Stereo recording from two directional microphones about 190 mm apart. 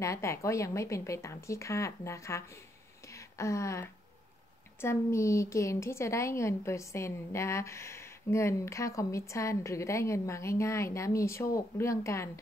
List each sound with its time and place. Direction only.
0.0 s a woman's voice: 15° left (ahead or behind)
3.1 s a sound: 15° left (ahead or behind)
4.8 s a woman's voice: 15° left (ahead or behind)